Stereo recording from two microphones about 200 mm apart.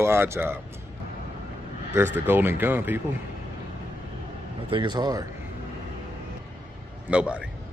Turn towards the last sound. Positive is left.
turn(degrees=-5)  # may be behind; listen again after turning